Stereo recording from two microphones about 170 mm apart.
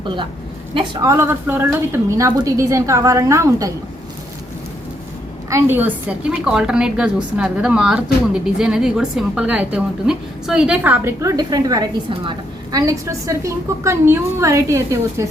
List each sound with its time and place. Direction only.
1.0 s a woman's voice: 15° right (ahead or behind)
5.5 s a woman's voice: 15° right (ahead or behind)